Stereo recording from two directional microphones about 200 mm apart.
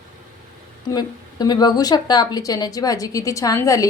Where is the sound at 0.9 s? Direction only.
20° left (ahead or behind).